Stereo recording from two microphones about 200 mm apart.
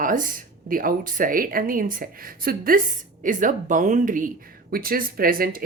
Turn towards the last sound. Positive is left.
turn(degrees=-45)  # may be behind; listen again after turning